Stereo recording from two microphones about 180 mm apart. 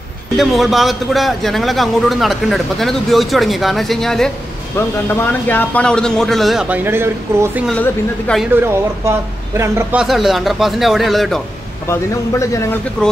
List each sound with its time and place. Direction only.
0.4 s a man's voice: centre (ahead or behind)
7.6 s a man's voice: 5° left (ahead or behind)
8.5 s speech: 15° right (ahead or behind)
10.0 s a man's voice: centre (ahead or behind)
11.9 s a man's voice: 15° left (ahead or behind)
13.0 s a man's voice: 5° left (ahead or behind)